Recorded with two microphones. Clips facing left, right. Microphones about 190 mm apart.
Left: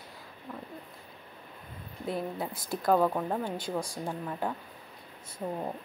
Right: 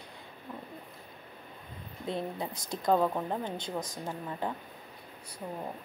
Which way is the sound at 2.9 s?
Centre (ahead or behind).